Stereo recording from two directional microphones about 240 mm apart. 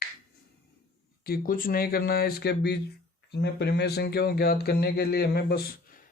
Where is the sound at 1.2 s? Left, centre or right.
Left.